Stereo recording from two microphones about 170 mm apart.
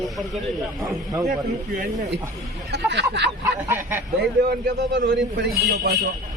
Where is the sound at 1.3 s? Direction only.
50° right (ahead or behind).